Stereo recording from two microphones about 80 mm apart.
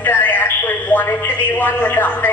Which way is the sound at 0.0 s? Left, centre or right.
Left.